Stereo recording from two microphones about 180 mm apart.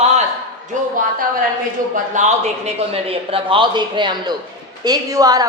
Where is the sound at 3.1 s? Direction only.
30° right (ahead or behind).